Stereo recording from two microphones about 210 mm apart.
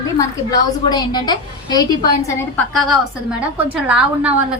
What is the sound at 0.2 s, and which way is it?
A woman's voice, 20° left (ahead or behind).